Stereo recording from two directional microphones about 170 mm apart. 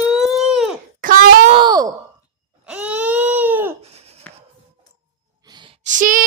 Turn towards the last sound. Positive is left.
turn(degrees=-50)  # may be behind; listen again after turning